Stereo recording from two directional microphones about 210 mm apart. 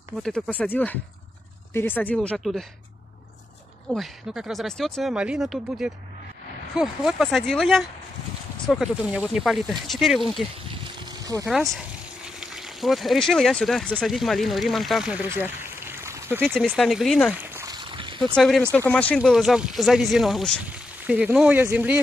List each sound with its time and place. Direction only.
0.2 s speech: 5° left (ahead or behind)
3.9 s speech: centre (ahead or behind)
10.7 s a sound: 25° right (ahead or behind)
12.4 s speech: centre (ahead or behind)
16.5 s a sound: centre (ahead or behind); by 18.2 s 25° right (ahead or behind)
18.3 s speech: centre (ahead or behind)